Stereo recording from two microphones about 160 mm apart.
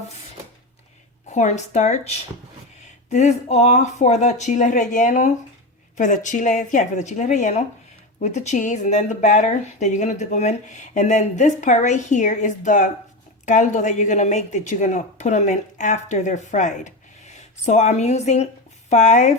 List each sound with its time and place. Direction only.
1.3 s speech: 45° left (ahead or behind)